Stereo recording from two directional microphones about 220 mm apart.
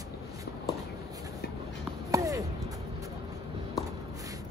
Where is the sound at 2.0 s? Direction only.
15° right (ahead or behind).